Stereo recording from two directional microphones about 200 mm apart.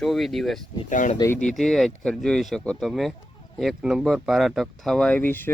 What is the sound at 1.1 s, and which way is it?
Speech, 15° left (ahead or behind).